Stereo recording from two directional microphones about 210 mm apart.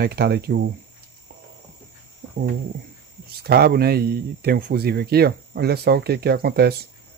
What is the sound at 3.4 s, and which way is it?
Speech, 50° right (ahead or behind).